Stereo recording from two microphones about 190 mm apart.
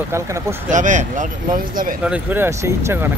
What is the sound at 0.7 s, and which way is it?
Speech, 40° right (ahead or behind).